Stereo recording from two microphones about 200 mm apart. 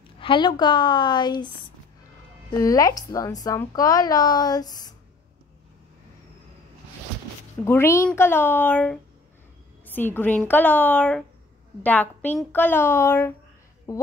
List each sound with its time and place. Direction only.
0.2 s speech: 25° left (ahead or behind)
7.6 s a woman's voice: 10° left (ahead or behind)